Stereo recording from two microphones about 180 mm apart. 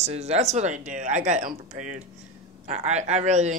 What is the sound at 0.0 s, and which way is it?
Speech, 35° right (ahead or behind).